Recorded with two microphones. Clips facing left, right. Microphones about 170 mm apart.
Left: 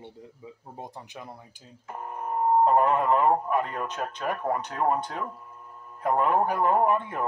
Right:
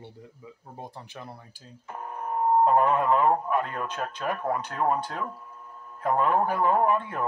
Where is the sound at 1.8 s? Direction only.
5° left (ahead or behind).